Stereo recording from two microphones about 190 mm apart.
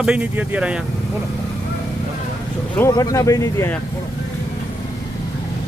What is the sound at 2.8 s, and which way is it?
Speech, 15° left (ahead or behind).